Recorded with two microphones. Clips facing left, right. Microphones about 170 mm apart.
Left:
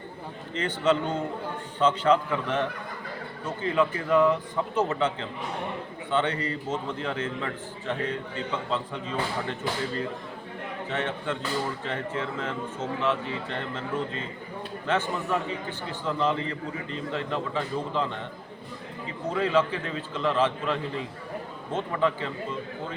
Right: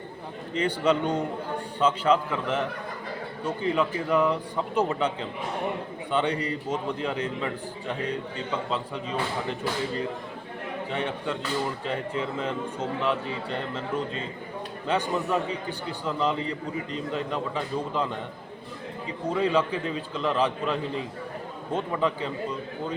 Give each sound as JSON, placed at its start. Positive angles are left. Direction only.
{"t": 0.6, "sound": "a man's voice", "side_deg": -10}
{"t": 10.9, "sound": "a man's voice", "side_deg": -10}
{"t": 19.4, "sound": "a man's voice", "side_deg": -20}